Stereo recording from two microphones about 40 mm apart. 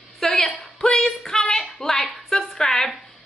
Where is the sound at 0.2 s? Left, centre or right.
Centre.